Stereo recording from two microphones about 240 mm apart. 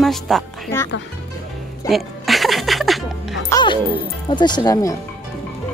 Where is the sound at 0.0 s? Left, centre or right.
Centre.